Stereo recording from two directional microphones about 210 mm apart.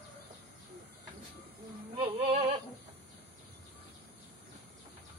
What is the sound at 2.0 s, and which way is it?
Music, 30° right (ahead or behind).